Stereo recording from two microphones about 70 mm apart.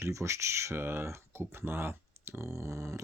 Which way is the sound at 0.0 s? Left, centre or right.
Right.